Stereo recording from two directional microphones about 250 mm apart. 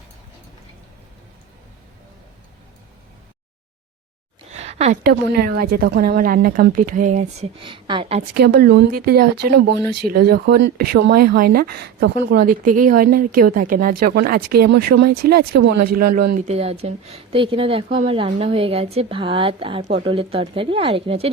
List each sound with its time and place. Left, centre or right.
4.5 s speech: right
8.4 s speech: right